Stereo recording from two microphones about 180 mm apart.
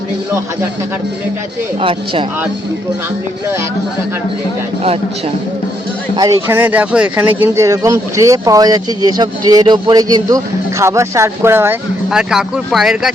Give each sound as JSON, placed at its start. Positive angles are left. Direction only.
{"t": 1.8, "sound": "speech", "side_deg": -30}
{"t": 6.1, "sound": "speech", "side_deg": -20}